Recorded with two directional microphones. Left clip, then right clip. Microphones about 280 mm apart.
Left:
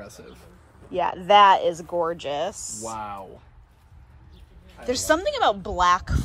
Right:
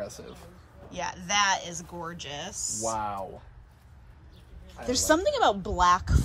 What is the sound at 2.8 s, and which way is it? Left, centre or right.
Speech, right.